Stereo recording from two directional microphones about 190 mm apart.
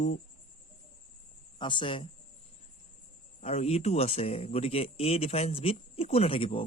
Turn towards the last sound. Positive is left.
turn(degrees=30)  # may be behind; listen again after turning